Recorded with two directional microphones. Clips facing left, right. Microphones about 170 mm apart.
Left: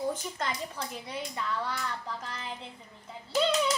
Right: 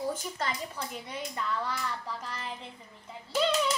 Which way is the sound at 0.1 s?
5° right (ahead or behind).